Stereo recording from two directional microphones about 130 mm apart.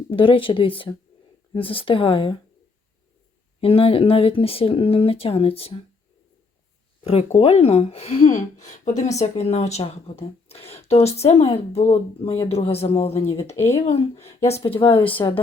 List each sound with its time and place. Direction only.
0.1 s a woman's voice: 40° left (ahead or behind)
3.6 s a woman's voice: 45° left (ahead or behind)
7.0 s a woman's voice: 50° left (ahead or behind)